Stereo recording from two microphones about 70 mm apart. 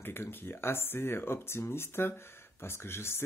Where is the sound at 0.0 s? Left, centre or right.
Left.